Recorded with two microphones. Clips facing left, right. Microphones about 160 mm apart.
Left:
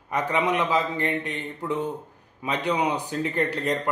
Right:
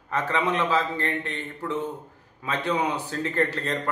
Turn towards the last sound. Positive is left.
turn(degrees=15)  # may be behind; listen again after turning